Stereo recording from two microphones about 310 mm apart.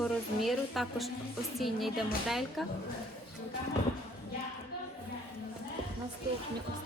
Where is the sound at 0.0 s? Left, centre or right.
Centre.